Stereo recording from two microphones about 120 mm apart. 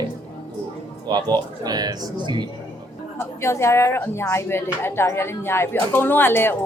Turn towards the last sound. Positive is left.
turn(degrees=20)  # may be behind; listen again after turning